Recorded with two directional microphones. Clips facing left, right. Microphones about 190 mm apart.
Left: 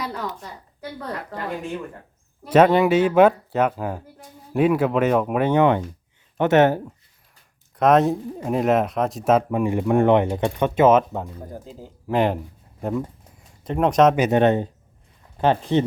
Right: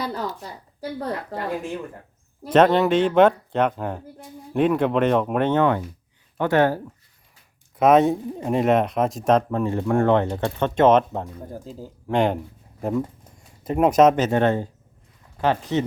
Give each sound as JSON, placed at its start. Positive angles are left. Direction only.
{"t": 0.0, "sound": "a sound", "side_deg": -30}
{"t": 0.8, "sound": "a woman's voice", "side_deg": -35}
{"t": 2.5, "sound": "speech", "side_deg": 10}
{"t": 7.8, "sound": "speech", "side_deg": 0}
{"t": 14.2, "sound": "speech", "side_deg": 20}